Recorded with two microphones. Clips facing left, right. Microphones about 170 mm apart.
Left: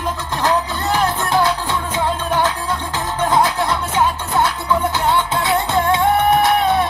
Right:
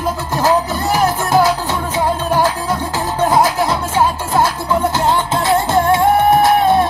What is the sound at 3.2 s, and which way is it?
Music, 35° right (ahead or behind).